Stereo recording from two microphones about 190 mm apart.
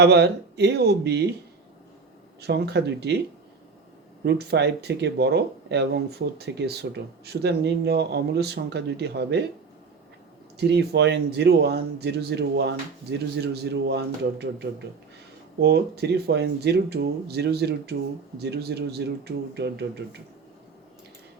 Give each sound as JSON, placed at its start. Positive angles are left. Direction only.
{"t": 0.0, "sound": "speech", "side_deg": -60}
{"t": 2.4, "sound": "speech", "side_deg": -60}
{"t": 4.2, "sound": "speech", "side_deg": -65}
{"t": 10.6, "sound": "speech", "side_deg": -60}